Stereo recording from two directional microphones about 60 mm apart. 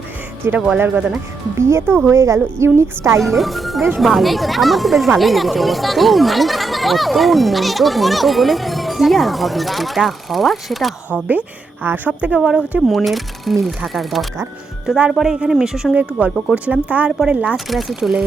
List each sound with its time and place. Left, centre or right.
0.4 s speech: right
3.2 s speech: centre
11.1 s a woman's voice: right
12.4 s speech: centre
14.8 s speech: centre
15.2 s speech: centre
16.6 s a woman's voice: right
17.1 s speech: centre
17.7 s speech: centre